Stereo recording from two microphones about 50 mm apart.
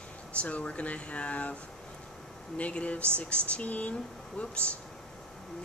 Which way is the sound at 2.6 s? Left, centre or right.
Left.